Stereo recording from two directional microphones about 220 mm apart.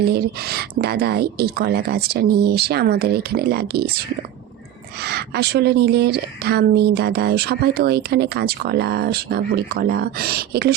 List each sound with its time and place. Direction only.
0.0 s speech: 45° right (ahead or behind)
5.0 s speech: 45° right (ahead or behind)